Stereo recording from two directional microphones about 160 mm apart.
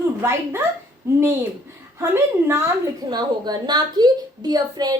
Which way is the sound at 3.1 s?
25° right (ahead or behind).